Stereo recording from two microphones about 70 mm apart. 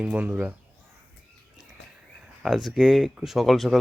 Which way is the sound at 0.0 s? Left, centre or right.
Centre.